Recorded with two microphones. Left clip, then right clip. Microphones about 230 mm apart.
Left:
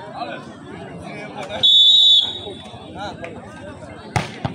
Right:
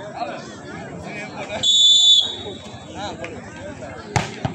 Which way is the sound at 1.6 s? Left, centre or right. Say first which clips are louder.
Left 2 dB; right.